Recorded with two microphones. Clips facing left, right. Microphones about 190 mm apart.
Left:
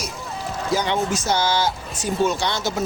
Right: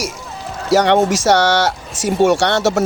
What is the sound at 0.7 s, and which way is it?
Speech, 80° right.